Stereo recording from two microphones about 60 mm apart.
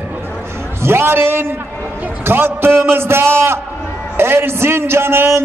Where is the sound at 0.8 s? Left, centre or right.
Right.